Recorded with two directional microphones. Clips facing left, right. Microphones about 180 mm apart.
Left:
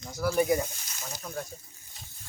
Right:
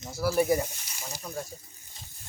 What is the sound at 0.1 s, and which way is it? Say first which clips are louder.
Speech: right 1 dB; 5° right (ahead or behind).